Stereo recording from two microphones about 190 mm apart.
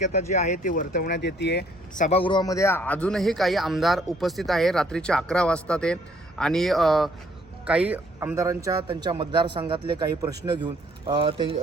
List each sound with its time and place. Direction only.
0.0 s speech: 35° left (ahead or behind); by 1.6 s 60° left (ahead or behind)
2.0 s a man's voice: 30° left (ahead or behind); by 11.6 s 30° right (ahead or behind)